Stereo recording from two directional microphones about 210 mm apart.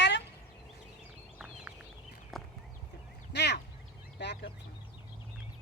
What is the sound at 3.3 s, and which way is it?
Quack, 55° left (ahead or behind).